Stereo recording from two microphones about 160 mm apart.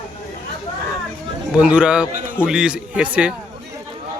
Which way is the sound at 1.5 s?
5° right (ahead or behind).